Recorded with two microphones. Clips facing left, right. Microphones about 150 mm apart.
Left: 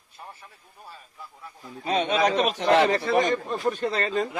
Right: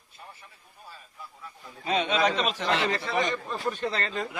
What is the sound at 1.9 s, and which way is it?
A man's voice, 50° left (ahead or behind).